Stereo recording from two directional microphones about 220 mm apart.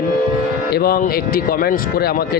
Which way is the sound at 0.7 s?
45° left (ahead or behind).